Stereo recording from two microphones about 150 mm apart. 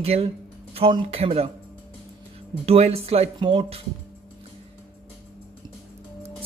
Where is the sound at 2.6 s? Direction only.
40° right (ahead or behind).